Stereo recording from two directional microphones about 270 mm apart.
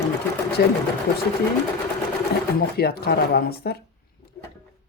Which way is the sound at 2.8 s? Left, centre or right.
Left.